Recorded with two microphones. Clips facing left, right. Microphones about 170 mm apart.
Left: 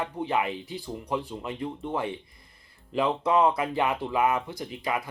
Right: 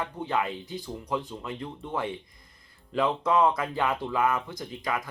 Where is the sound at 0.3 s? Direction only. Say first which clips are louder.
Even; 20° left (ahead or behind).